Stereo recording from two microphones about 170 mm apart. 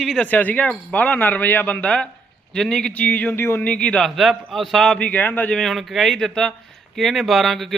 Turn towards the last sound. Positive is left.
turn(degrees=0)  # may be behind; listen again after turning